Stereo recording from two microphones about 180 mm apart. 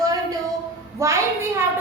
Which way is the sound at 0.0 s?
20° right (ahead or behind).